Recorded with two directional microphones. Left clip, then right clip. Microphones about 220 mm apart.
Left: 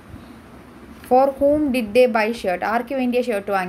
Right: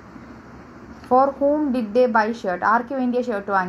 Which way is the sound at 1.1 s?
25° left (ahead or behind).